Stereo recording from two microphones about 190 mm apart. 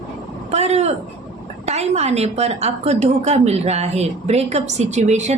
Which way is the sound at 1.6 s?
35° right (ahead or behind).